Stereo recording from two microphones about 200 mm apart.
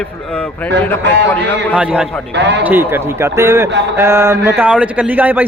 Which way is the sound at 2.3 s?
60° right (ahead or behind).